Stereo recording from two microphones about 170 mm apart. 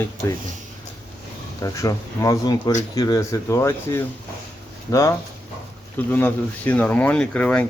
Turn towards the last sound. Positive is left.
turn(degrees=10)  # may be behind; listen again after turning